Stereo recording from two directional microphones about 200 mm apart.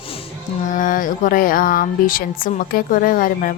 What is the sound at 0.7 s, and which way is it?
Speech, 40° left (ahead or behind).